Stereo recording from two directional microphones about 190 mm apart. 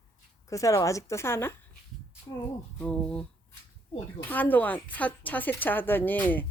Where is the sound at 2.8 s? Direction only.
5° left (ahead or behind).